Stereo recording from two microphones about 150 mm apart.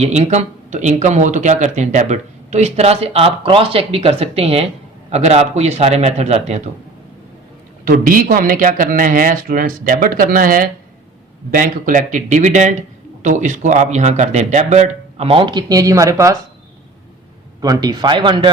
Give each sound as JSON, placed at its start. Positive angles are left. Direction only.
{"t": 0.0, "sound": "speech", "side_deg": -50}
{"t": 7.9, "sound": "speech", "side_deg": -65}
{"t": 17.6, "sound": "speech", "side_deg": -25}